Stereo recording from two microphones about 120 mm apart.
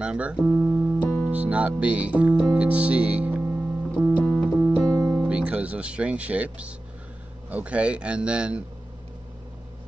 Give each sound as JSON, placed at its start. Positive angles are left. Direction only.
{"t": 0.0, "sound": "speech", "side_deg": -10}
{"t": 0.5, "sound": "music", "side_deg": -15}
{"t": 1.3, "sound": "speech", "side_deg": -10}
{"t": 4.2, "sound": "music", "side_deg": 10}
{"t": 4.6, "sound": "music", "side_deg": -25}
{"t": 5.1, "sound": "speech", "side_deg": -10}